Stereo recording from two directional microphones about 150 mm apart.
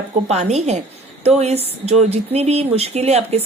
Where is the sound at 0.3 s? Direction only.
50° right (ahead or behind).